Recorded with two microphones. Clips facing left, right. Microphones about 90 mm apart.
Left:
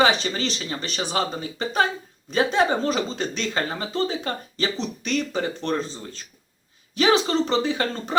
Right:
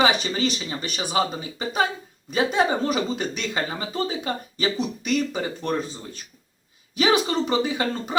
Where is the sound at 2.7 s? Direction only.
15° right (ahead or behind).